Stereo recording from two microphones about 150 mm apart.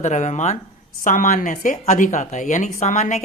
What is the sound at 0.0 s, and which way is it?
Speech, 55° left (ahead or behind).